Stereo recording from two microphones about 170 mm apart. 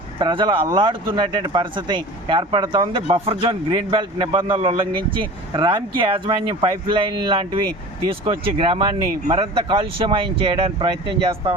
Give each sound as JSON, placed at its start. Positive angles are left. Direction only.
{"t": 0.2, "sound": "speech", "side_deg": -25}